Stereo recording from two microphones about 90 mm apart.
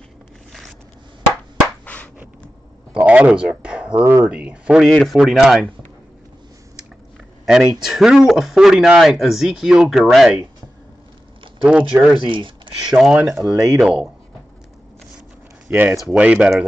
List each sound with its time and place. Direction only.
2.9 s speech: 15° right (ahead or behind)
4.0 s speech: 25° right (ahead or behind)
4.3 s speech: 15° right (ahead or behind)
5.0 s speech: centre (ahead or behind)
7.4 s speech: 5° right (ahead or behind)
11.6 s speech: 10° right (ahead or behind)
12.2 s speech: 70° right (ahead or behind)
12.9 s speech: 10° right (ahead or behind)
13.4 s speech: 40° right (ahead or behind)
13.7 s speech: 5° right (ahead or behind)
15.7 s speech: 25° right (ahead or behind)
16.1 s speech: 15° right (ahead or behind)